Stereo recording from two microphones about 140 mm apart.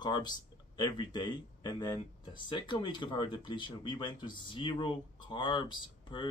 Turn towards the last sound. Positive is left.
turn(degrees=35)  # may be behind; listen again after turning